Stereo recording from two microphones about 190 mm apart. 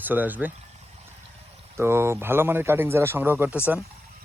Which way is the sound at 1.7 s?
15° right (ahead or behind).